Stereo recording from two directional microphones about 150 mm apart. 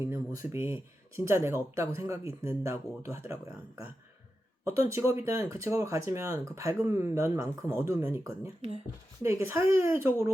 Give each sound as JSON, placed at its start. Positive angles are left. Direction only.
{"t": 0.0, "sound": "speech", "side_deg": -15}
{"t": 4.6, "sound": "speech", "side_deg": -20}